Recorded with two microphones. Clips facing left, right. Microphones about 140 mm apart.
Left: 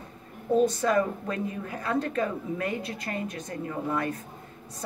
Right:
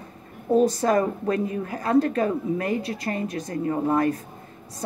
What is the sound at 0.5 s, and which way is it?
A woman's voice, 40° right (ahead or behind).